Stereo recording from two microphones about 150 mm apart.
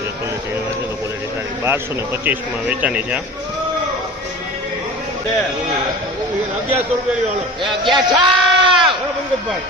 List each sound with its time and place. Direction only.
2.2 s speech: 10° right (ahead or behind)
7.6 s a man's voice: 30° right (ahead or behind)